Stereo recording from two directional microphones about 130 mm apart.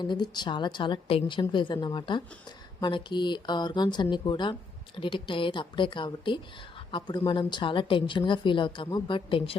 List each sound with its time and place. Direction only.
0.0 s a woman's voice: 35° left (ahead or behind)